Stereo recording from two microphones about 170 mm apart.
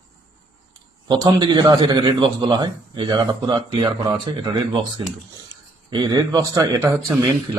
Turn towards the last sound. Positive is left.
turn(degrees=-25)  # may be behind; listen again after turning